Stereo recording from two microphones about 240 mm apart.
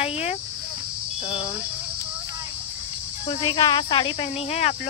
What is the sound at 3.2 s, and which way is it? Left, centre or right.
Speech, centre.